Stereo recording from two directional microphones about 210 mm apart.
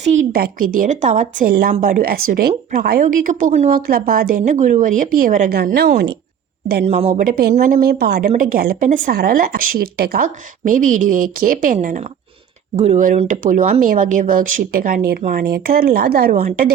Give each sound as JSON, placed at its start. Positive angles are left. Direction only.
{"t": 0.0, "sound": "speech", "side_deg": -35}
{"t": 6.8, "sound": "speech", "side_deg": -30}